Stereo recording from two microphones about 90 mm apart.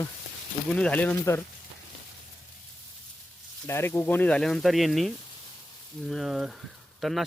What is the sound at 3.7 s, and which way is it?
Speech, 30° left (ahead or behind).